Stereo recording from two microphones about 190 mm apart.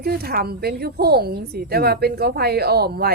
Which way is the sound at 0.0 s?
55° right (ahead or behind).